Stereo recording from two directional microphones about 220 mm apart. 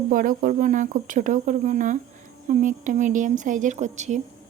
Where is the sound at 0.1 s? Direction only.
40° right (ahead or behind).